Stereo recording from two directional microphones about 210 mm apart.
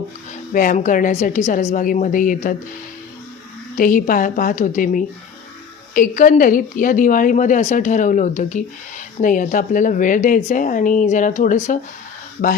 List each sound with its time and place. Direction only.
0.5 s a woman's voice: 40° left (ahead or behind)
3.8 s a woman's voice: 40° left (ahead or behind)